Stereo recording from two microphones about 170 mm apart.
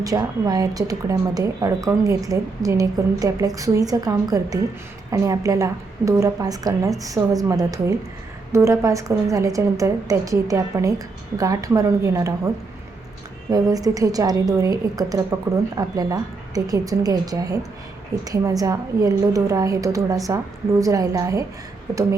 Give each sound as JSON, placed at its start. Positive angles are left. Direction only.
{"t": 0.0, "sound": "a woman's voice", "side_deg": -20}
{"t": 13.5, "sound": "a woman's voice", "side_deg": -20}